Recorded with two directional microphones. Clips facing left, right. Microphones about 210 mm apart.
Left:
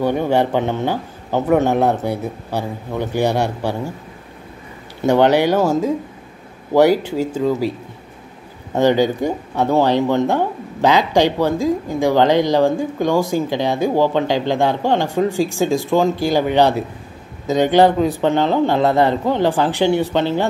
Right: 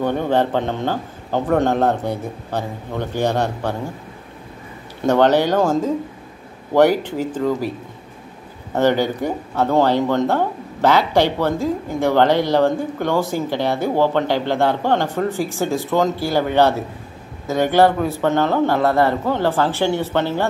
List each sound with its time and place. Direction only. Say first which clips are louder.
0.0 s speech: left 2 dB; 10° left (ahead or behind)
5.0 s speech: left 1 dB; 10° left (ahead or behind)
8.7 s speech: left 2 dB; 15° left (ahead or behind)